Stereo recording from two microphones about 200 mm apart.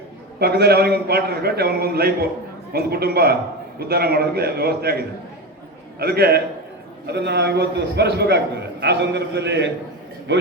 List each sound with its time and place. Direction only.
0.3 s a man's voice: 55° right (ahead or behind)